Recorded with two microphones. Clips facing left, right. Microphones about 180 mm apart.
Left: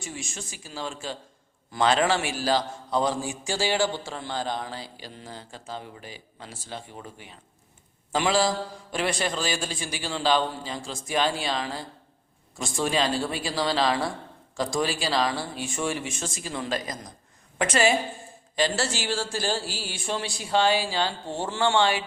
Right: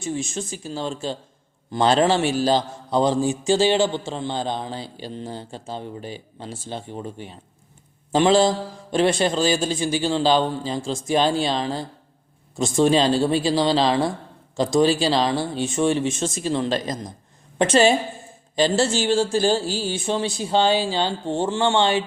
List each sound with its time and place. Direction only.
0.6 s a man's voice: 25° right (ahead or behind)